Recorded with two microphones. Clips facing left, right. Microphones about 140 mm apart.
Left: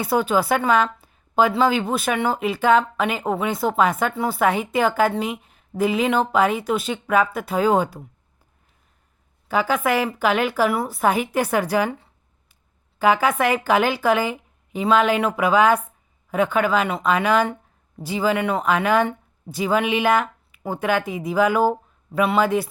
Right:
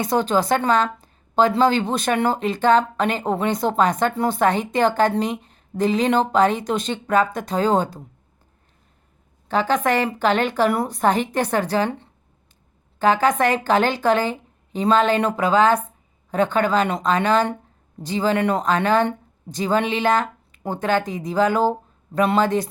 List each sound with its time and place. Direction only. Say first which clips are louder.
0.0 s speech: even; 10° left (ahead or behind)
0.9 s a sound: even; 10° left (ahead or behind)
1.9 s speech: right 1 dB; 5° left (ahead or behind)
9.5 s speech: right 1 dB; 10° left (ahead or behind)